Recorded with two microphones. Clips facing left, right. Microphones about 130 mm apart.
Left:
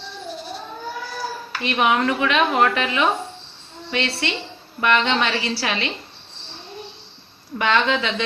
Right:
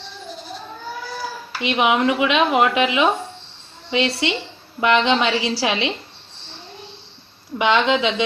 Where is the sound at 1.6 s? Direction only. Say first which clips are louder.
Right 2 dB; 15° right (ahead or behind).